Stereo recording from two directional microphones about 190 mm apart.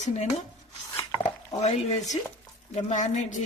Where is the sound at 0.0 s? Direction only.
40° left (ahead or behind).